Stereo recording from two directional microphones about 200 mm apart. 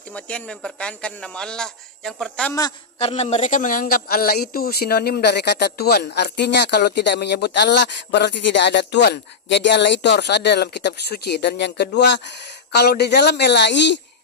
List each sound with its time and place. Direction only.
0.1 s speech: 5° left (ahead or behind)
3.0 s a man's voice: 30° left (ahead or behind); by 14.0 s 60° left (ahead or behind)